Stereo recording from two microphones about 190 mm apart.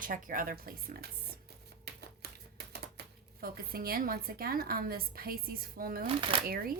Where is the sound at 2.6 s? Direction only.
60° right (ahead or behind).